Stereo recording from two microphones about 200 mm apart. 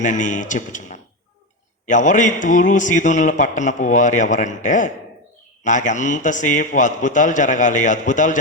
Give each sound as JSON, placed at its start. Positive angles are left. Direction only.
{"t": 0.0, "sound": "a man's voice", "side_deg": 40}